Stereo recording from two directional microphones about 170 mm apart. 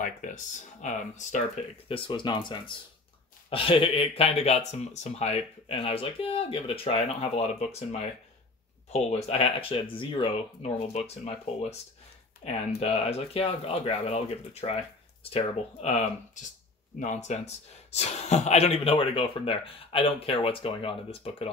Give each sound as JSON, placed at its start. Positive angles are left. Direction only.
{"t": 0.0, "sound": "speech", "side_deg": 50}
{"t": 1.9, "sound": "speech", "side_deg": 30}
{"t": 8.9, "sound": "speech", "side_deg": 40}